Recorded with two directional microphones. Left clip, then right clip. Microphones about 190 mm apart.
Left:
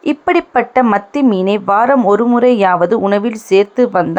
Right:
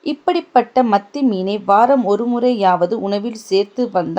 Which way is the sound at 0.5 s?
20° left (ahead or behind).